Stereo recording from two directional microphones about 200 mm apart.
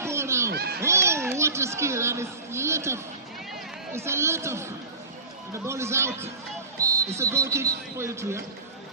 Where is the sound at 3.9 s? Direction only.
15° right (ahead or behind).